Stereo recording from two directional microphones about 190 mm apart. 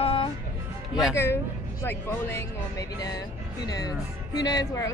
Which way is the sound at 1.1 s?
15° left (ahead or behind).